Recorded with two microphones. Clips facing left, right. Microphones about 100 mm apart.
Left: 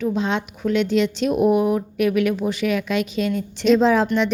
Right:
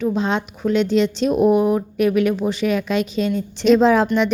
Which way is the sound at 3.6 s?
55° right (ahead or behind).